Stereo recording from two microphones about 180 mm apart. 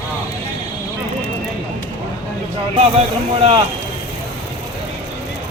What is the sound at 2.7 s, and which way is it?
Speech, 35° right (ahead or behind).